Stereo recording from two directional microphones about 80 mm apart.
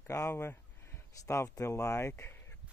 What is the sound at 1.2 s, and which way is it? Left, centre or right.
Speech, left.